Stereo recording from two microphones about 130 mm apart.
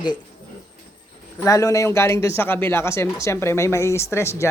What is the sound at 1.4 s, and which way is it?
A man's voice, 25° left (ahead or behind).